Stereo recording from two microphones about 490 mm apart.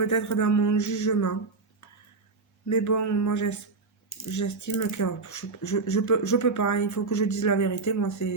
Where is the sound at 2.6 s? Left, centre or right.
Left.